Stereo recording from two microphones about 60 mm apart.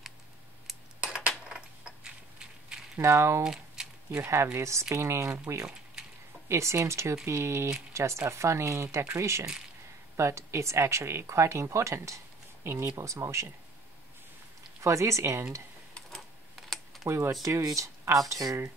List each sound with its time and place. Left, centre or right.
1.0 s cutlery: centre
2.0 s a sound: centre
3.0 s speech: right
3.4 s a sound: centre
4.2 s speech: right
6.5 s speech: right
14.8 s speech: right
16.5 s computer keyboard: centre
17.0 s speech: right
17.3 s speech: right